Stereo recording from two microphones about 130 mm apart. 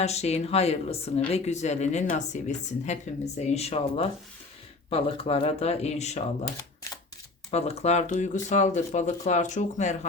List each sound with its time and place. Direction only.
0.0 s speech: 55° left (ahead or behind)
7.5 s speech: 55° left (ahead or behind)